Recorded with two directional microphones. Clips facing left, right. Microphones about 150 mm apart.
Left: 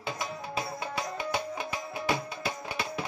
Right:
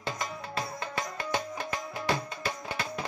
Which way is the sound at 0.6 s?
10° left (ahead or behind).